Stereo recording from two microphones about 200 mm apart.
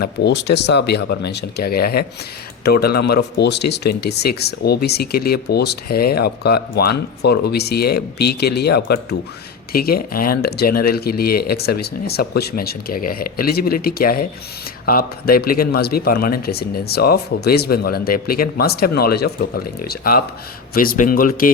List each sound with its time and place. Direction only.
0.0 s speech: 55° left (ahead or behind)